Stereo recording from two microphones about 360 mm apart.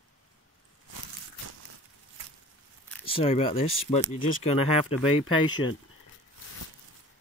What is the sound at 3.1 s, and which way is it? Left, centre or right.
Speech, centre.